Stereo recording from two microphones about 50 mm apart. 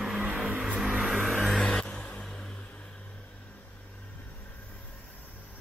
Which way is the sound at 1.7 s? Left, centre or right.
Centre.